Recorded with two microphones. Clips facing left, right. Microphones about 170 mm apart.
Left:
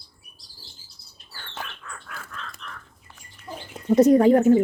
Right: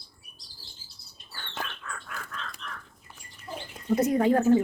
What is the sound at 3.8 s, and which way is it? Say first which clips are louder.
Speech: left 8 dB; 70° left (ahead or behind).